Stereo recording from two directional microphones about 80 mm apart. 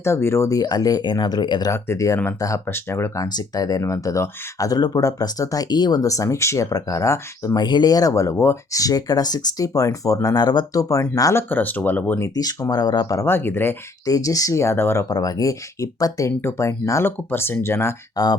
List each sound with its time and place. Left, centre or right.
0.0 s speech: left
0.5 s speech: left
1.7 s speech: left
3.2 s speech: left
7.5 s speech: left
10.4 s speech: left
10.8 s speech: left
11.3 s speech: left
12.3 s speech: left
13.2 s speech: left
14.0 s speech: left
15.1 s speech: left
18.2 s speech: left